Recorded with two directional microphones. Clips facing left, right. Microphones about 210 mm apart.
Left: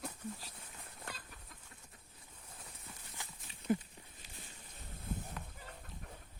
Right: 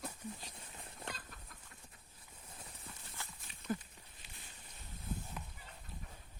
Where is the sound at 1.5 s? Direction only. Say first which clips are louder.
Even; 20° left (ahead or behind).